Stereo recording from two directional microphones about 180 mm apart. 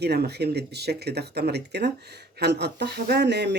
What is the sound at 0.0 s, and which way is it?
Speech, 65° right (ahead or behind).